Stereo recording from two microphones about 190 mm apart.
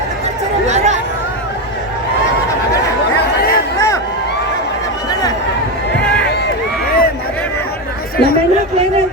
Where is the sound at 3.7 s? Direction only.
15° left (ahead or behind).